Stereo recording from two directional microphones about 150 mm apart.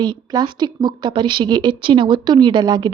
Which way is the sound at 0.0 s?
30° right (ahead or behind).